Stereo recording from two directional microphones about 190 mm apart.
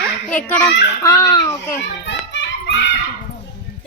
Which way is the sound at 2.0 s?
70° left (ahead or behind).